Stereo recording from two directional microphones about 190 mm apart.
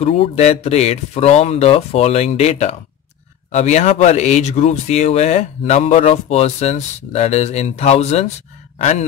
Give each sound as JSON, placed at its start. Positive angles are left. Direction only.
{"t": 0.0, "sound": "speech", "side_deg": 35}